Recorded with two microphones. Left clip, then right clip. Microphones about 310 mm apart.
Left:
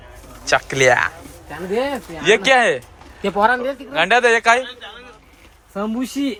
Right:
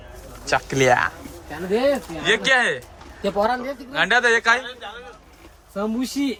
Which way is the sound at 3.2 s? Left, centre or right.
Left.